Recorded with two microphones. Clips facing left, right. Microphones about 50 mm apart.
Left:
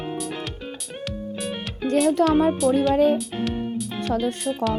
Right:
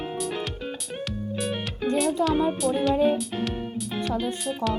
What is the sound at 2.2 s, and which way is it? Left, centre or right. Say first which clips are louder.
Speech: left 5 dB; left.